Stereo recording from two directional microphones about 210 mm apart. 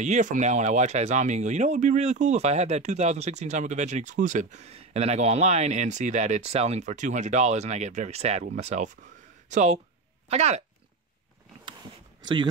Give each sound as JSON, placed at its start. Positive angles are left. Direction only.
{"t": 0.0, "sound": "speech", "side_deg": -35}